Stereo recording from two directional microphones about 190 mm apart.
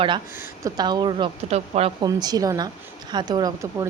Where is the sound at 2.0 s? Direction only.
20° right (ahead or behind).